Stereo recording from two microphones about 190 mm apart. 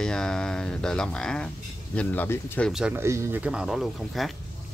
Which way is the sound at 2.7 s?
10° right (ahead or behind).